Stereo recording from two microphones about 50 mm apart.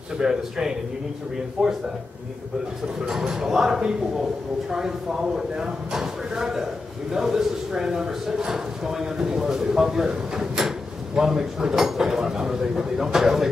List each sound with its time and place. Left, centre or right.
0.2 s speech: centre
3.1 s speech: centre